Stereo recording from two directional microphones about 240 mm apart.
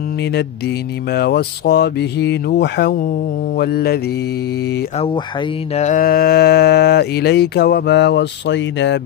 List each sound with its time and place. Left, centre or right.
1.1 s speech: left
3.5 s mantra: left
5.8 s speech: left